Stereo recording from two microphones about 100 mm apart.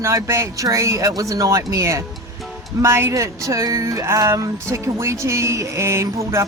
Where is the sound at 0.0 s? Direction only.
30° right (ahead or behind).